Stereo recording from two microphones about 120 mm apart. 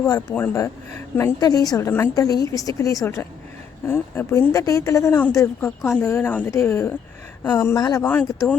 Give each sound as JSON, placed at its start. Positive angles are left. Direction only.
{"t": 0.0, "sound": "speech", "side_deg": 20}
{"t": 1.4, "sound": "a woman's voice", "side_deg": 30}
{"t": 4.3, "sound": "speech", "side_deg": 30}
{"t": 5.5, "sound": "speech", "side_deg": 15}
{"t": 7.8, "sound": "a woman's voice", "side_deg": 35}
{"t": 8.0, "sound": "speech", "side_deg": 15}